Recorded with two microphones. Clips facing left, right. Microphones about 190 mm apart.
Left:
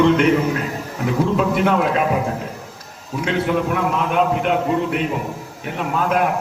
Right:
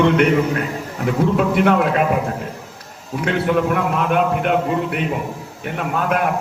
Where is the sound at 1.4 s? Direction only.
55° right (ahead or behind).